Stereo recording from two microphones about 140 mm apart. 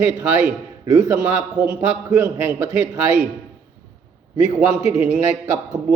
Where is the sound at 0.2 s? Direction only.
10° right (ahead or behind).